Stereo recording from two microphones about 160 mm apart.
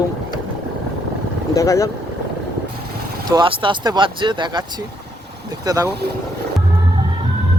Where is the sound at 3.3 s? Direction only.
30° right (ahead or behind).